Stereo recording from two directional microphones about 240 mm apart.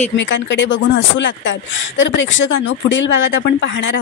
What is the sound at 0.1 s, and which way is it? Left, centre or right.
Speech, left.